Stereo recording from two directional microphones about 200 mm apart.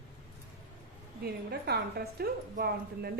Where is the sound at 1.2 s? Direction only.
55° right (ahead or behind).